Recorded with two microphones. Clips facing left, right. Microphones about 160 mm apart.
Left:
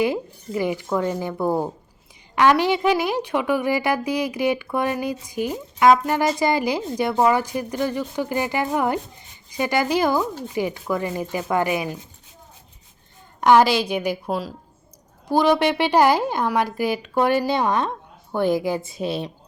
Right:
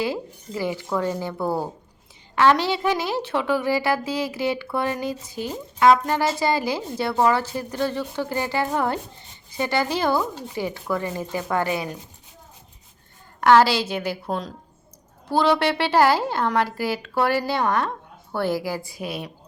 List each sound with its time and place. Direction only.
0.0 s a woman's voice: 20° left (ahead or behind)
13.4 s a woman's voice: 15° left (ahead or behind)